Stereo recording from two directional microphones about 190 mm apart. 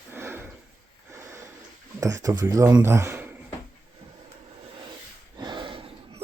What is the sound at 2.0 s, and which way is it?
Speech, 15° right (ahead or behind).